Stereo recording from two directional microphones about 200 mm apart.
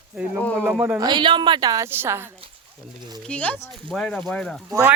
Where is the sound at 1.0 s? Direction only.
20° right (ahead or behind).